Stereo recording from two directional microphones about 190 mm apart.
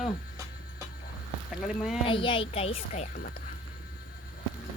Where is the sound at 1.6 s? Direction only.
Centre (ahead or behind).